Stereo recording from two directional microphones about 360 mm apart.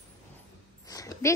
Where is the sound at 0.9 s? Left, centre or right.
Centre.